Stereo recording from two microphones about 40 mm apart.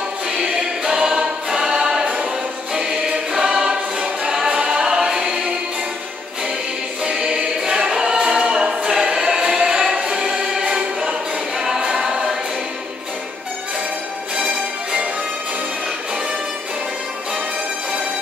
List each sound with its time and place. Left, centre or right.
0.4 s choir: centre
7.2 s choir: centre
9.9 s choir: right; by 12.2 s centre
14.3 s music: centre